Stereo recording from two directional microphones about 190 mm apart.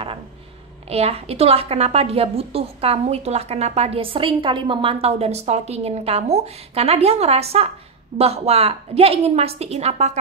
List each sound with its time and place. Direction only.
0.8 s a woman's voice: 30° right (ahead or behind)